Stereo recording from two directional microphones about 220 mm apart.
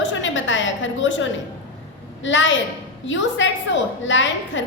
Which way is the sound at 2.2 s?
55° left (ahead or behind).